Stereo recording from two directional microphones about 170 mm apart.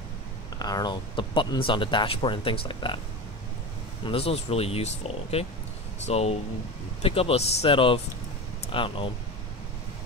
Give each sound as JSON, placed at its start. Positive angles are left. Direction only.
{"t": 0.6, "sound": "speech", "side_deg": 20}
{"t": 4.0, "sound": "speech", "side_deg": 35}